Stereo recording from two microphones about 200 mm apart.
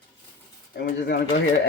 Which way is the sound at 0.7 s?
55° left (ahead or behind).